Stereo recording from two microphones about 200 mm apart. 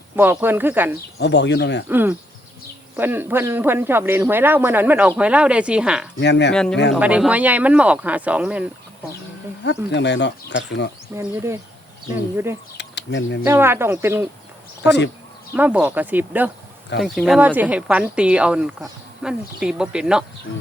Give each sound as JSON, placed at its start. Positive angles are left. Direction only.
{"t": 0.2, "sound": "speech", "side_deg": -10}
{"t": 1.2, "sound": "speech", "side_deg": 60}
{"t": 1.9, "sound": "speech", "side_deg": -10}
{"t": 6.1, "sound": "speech", "side_deg": 60}
{"t": 6.5, "sound": "speech", "side_deg": 5}
{"t": 9.6, "sound": "speech", "side_deg": 60}
{"t": 11.1, "sound": "speech", "side_deg": -15}
{"t": 12.7, "sound": "speech", "side_deg": 60}
{"t": 13.4, "sound": "speech", "side_deg": -10}
{"t": 14.8, "sound": "speech", "side_deg": 60}
{"t": 15.5, "sound": "speech", "side_deg": -10}